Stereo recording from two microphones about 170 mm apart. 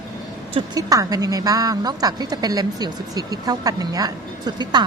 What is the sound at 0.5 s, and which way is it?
A woman's voice, 20° right (ahead or behind).